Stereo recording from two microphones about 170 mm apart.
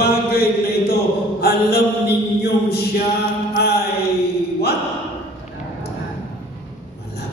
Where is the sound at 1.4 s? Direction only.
65° left (ahead or behind).